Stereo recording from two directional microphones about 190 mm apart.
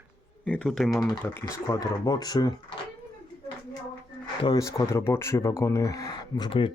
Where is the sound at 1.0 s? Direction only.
15° left (ahead or behind).